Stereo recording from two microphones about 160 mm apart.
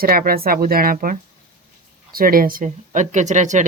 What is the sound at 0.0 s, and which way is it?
Speech, 70° right (ahead or behind).